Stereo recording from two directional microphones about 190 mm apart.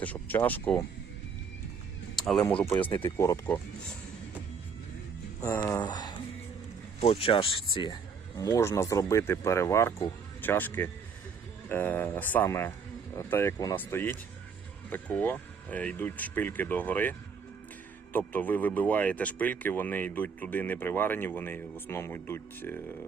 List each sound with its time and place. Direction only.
0.0 s speech: 10° left (ahead or behind)
2.1 s a sound: centre (ahead or behind)
2.5 s speech: 10° left (ahead or behind)
5.4 s speech: 10° left (ahead or behind)
8.4 s speech: 15° left (ahead or behind)
18.3 s speech: 10° left (ahead or behind)